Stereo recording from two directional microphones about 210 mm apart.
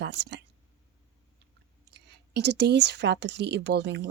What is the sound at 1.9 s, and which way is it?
Speech, 55° right (ahead or behind).